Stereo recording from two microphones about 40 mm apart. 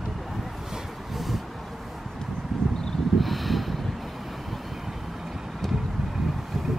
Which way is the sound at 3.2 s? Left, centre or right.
Centre.